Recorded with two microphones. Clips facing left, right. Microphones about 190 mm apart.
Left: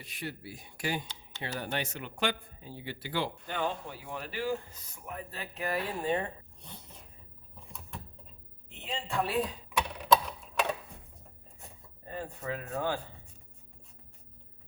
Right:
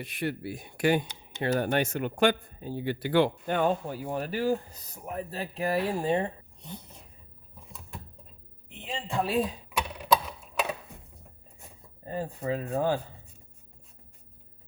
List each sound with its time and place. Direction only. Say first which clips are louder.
0.0 s speech: right 9 dB; 60° right (ahead or behind); by 6.3 s 30° right (ahead or behind)
8.9 s speech: right 3 dB; 20° right (ahead or behind)
10.0 s a sound: even; 5° right (ahead or behind)
12.0 s speech: right 6 dB; 35° right (ahead or behind)